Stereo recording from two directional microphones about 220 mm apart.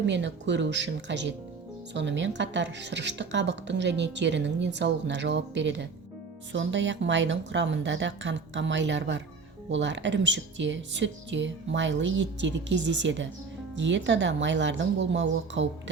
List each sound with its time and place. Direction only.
0.0 s speech: 55° right (ahead or behind)